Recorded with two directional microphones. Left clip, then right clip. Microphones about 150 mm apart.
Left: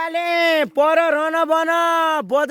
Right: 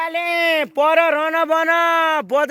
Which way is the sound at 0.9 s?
45° left (ahead or behind).